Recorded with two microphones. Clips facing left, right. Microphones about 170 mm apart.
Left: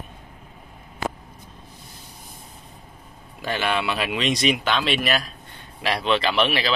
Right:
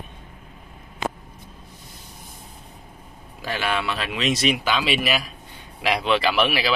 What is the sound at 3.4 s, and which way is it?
Speech, centre (ahead or behind).